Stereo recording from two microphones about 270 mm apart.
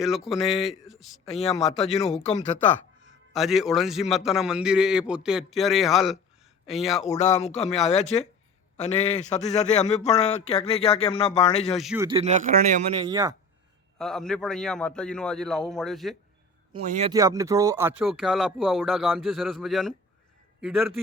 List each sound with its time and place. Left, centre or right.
0.0 s speech: centre
1.3 s a man's voice: left
3.3 s speech: centre
7.2 s a man's voice: left
11.7 s speech: centre
12.0 s a man's voice: right
13.1 s speech: centre
14.0 s speech: centre
16.7 s a man's voice: right
17.1 s speech: centre